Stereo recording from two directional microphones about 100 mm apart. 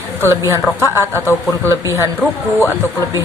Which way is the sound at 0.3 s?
30° right (ahead or behind).